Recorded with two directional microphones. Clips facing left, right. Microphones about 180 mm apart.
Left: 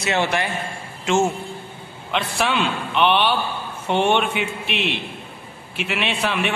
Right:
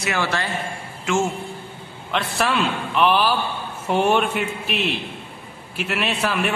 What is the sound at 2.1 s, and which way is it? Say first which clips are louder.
A man's voice: even; centre (ahead or behind).